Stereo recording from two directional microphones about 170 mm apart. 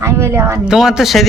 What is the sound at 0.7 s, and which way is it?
Speech, 5° right (ahead or behind).